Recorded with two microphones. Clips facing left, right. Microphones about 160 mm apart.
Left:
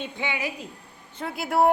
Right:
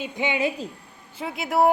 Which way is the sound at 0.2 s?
20° right (ahead or behind).